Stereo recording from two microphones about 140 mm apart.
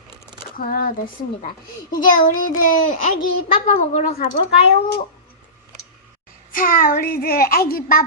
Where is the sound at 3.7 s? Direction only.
55° left (ahead or behind).